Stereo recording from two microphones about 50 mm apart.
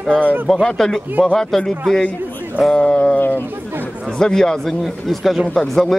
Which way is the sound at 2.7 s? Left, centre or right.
Centre.